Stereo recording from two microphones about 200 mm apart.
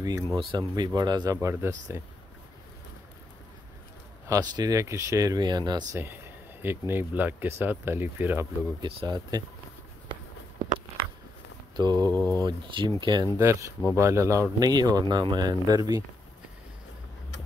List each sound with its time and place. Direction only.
0.0 s speech: 15° right (ahead or behind)
4.3 s speech: 20° right (ahead or behind)
8.8 s speech: 20° right (ahead or behind)
11.7 s speech: 20° right (ahead or behind)